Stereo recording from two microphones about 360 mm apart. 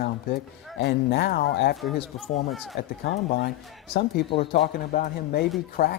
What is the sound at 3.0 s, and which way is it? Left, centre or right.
Speech, left.